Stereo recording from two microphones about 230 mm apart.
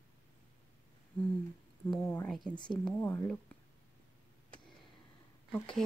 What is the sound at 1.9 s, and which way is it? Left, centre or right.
Speech, centre.